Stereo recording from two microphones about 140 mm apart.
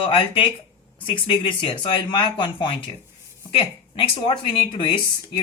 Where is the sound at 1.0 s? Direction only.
35° left (ahead or behind).